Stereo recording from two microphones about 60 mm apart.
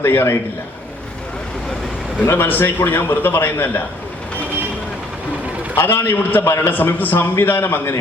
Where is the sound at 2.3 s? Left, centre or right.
Left.